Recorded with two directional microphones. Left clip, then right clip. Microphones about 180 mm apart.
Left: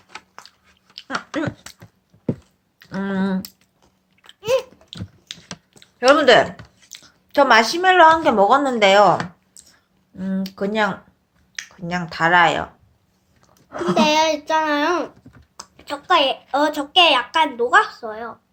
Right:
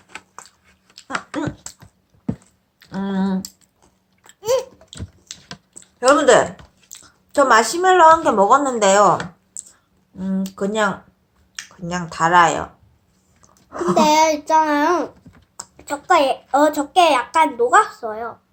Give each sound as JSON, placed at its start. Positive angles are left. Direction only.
{"t": 2.7, "sound": "a sound", "side_deg": 25}
{"t": 3.8, "sound": "babbling", "side_deg": -5}
{"t": 5.3, "sound": "typing", "side_deg": 25}
{"t": 6.1, "sound": "speech", "side_deg": 25}
{"t": 10.2, "sound": "a sound", "side_deg": 25}
{"t": 12.0, "sound": "speech", "side_deg": 25}
{"t": 13.9, "sound": "a child's voice", "side_deg": -5}